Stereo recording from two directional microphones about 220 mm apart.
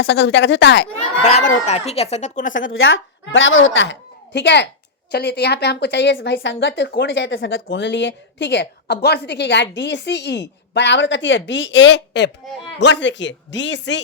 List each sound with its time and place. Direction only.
0.0 s speech: 55° left (ahead or behind)
1.2 s speech: 30° left (ahead or behind)
2.7 s a woman's voice: 60° left (ahead or behind)